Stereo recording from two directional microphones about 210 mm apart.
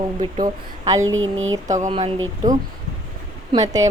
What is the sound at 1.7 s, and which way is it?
Speech, 35° right (ahead or behind).